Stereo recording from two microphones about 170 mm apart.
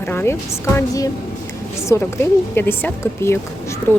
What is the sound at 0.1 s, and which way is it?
Speech, 15° left (ahead or behind).